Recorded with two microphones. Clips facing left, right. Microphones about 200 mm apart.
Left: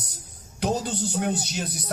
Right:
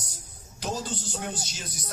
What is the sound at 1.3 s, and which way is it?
Speech, 65° left (ahead or behind).